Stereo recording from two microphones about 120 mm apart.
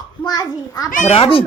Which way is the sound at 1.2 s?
50° left (ahead or behind).